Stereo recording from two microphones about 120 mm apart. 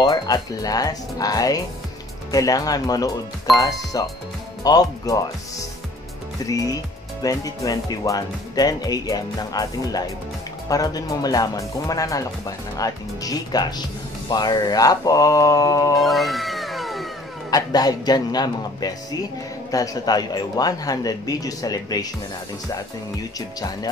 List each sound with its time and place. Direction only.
0.0 s speech: 35° left (ahead or behind)
6.4 s speech: 30° left (ahead or behind)
16.0 s cat: centre (ahead or behind)
17.5 s speech: 30° left (ahead or behind)